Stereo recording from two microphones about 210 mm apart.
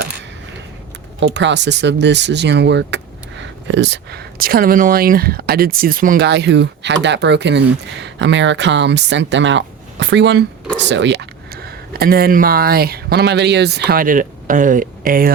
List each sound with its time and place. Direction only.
1.2 s speech: 60° right (ahead or behind); by 15.3 s 45° right (ahead or behind)